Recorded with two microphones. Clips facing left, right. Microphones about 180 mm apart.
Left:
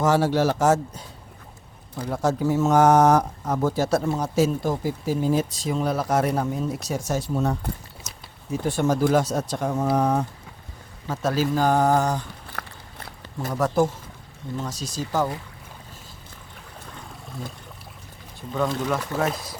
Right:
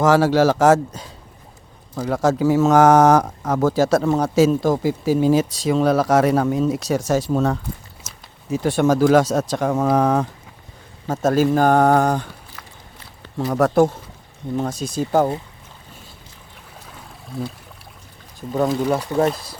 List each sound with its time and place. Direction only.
0.0 s speech: 90° right
11.1 s speech: 45° right (ahead or behind)
12.5 s a sound: 55° left (ahead or behind)
13.5 s speech: 65° right (ahead or behind)
17.4 s speech: 65° right (ahead or behind)
18.3 s speech: 40° right (ahead or behind)